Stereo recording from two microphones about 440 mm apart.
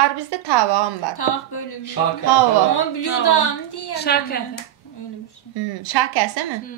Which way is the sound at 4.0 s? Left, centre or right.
Left.